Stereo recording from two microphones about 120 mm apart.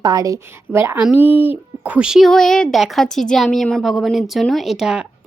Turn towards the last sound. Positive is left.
turn(degrees=-5)  # may be behind; listen again after turning